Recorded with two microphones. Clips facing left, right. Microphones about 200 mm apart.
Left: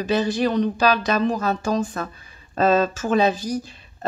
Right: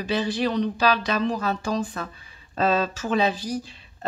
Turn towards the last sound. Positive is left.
turn(degrees=45)  # may be behind; listen again after turning